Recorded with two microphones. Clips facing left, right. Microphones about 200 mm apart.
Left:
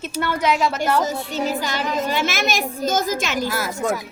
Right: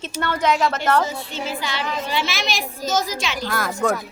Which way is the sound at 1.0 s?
40° left (ahead or behind).